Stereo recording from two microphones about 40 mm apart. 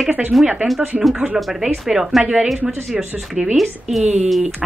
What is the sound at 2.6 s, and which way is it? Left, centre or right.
Speech, right.